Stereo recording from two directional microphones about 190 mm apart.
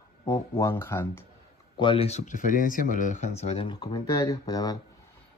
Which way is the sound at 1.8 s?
30° left (ahead or behind).